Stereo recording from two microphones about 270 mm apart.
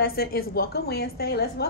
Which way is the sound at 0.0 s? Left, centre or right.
Left.